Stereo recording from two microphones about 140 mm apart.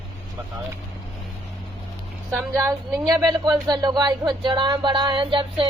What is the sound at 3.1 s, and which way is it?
Speech, 30° right (ahead or behind).